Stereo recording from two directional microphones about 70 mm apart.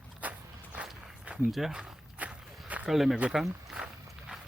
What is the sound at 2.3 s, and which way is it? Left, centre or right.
Walk, centre.